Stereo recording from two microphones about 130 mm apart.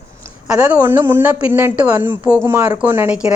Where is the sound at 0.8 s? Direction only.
25° right (ahead or behind).